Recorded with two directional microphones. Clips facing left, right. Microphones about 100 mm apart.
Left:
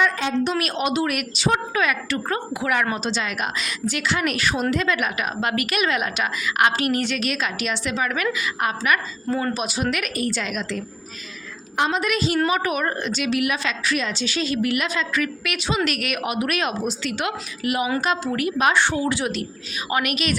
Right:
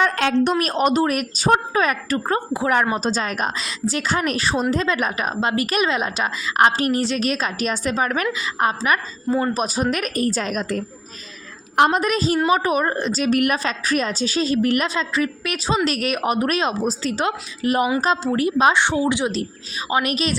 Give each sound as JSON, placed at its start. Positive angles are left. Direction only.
{"t": 0.2, "sound": "a woman's voice", "side_deg": -90}
{"t": 0.6, "sound": "a woman's voice", "side_deg": -40}
{"t": 11.9, "sound": "a woman's voice", "side_deg": -35}
{"t": 19.9, "sound": "a woman's voice", "side_deg": -30}